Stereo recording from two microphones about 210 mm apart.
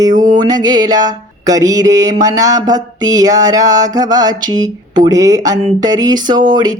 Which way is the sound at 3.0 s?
15° right (ahead or behind).